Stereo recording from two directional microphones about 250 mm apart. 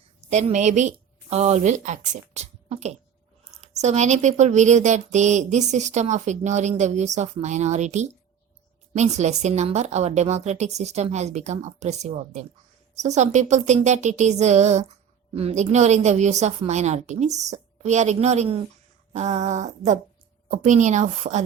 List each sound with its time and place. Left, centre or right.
0.2 s a woman's voice: right
2.3 s a sound: right
3.6 s a woman's voice: right